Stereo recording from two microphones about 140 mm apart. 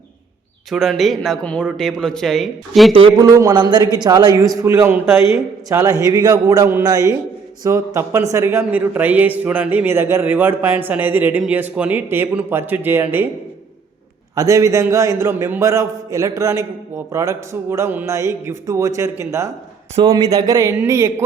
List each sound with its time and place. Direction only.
0.7 s speech: centre (ahead or behind)
3.2 s a man's voice: 25° right (ahead or behind)
14.3 s a man's voice: 25° right (ahead or behind)
20.0 s a man's voice: 35° right (ahead or behind); by 21.2 s 20° right (ahead or behind)